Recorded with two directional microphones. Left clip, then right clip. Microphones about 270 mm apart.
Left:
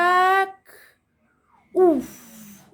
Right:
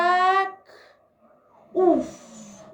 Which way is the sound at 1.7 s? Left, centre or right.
Left.